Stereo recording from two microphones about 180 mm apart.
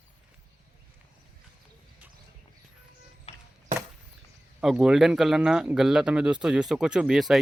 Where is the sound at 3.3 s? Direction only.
35° left (ahead or behind).